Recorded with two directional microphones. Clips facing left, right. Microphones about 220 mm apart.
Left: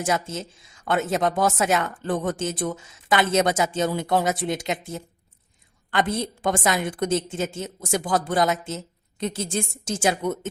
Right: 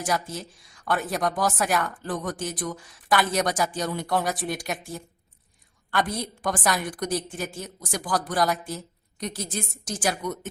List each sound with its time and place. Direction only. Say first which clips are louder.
0.0 s a woman's voice: left 3 dB; 25° left (ahead or behind)